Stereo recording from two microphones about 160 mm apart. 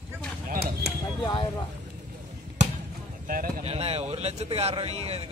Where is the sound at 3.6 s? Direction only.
40° right (ahead or behind).